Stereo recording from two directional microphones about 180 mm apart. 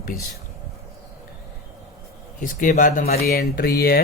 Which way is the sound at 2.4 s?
45° left (ahead or behind).